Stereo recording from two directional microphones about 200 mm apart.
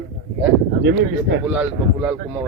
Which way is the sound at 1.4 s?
5° right (ahead or behind).